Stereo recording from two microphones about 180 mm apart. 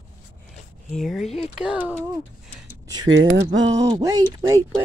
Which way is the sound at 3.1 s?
90° right.